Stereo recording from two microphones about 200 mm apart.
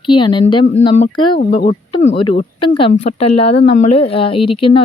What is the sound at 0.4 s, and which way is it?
Speech, 35° left (ahead or behind).